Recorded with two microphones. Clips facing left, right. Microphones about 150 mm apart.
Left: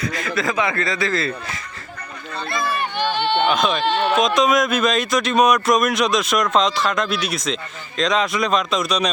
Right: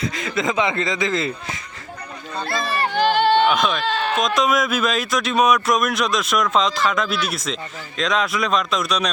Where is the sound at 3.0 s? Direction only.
40° right (ahead or behind).